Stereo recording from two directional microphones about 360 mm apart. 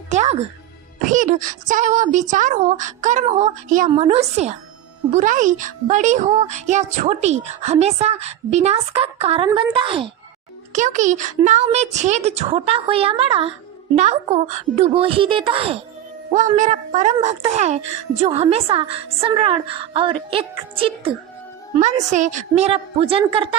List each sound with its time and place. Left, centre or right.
0.1 s a woman's voice: centre